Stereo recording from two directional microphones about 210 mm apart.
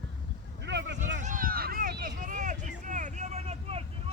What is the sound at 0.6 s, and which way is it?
Vehicle, 55° right (ahead or behind).